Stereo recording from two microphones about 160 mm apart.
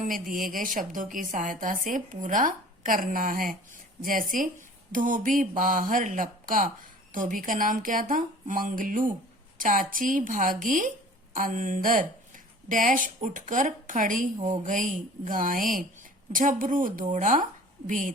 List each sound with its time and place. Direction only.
0.0 s a woman's voice: 60° right (ahead or behind)